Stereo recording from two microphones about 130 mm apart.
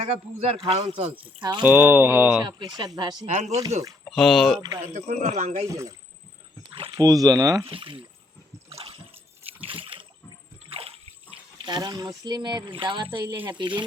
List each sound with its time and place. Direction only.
0.0 s speech: 50° right (ahead or behind)
1.4 s speech: 35° right (ahead or behind)
1.6 s speech: 10° right (ahead or behind)
2.4 s speech: 30° right (ahead or behind)
3.2 s speech: 65° right (ahead or behind)
4.0 s speech: 5° left (ahead or behind)
4.9 s speech: 65° right (ahead or behind)
5.6 s speech: 25° right (ahead or behind)
6.9 s speech: 25° right (ahead or behind)
7.6 s speech: 40° right (ahead or behind)
9.5 s a sound: 45° right (ahead or behind)
13.1 s speech: 15° right (ahead or behind)
13.5 s speech: 35° right (ahead or behind)